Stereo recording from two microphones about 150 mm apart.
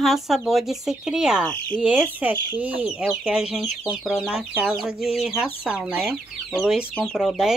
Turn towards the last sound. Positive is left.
turn(degrees=0)  # may be behind; listen again after turning